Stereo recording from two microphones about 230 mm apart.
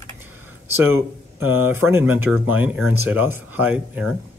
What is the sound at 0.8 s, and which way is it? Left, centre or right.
Speech, centre.